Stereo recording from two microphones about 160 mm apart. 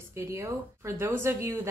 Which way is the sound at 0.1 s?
20° right (ahead or behind).